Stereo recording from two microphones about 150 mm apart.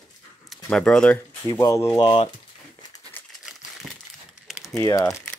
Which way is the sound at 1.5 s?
25° left (ahead or behind).